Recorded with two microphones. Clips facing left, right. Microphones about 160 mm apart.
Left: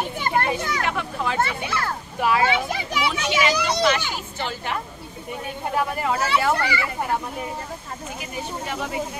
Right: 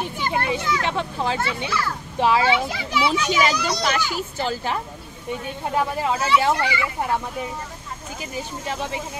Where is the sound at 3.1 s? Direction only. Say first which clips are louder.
Even; 40° right (ahead or behind).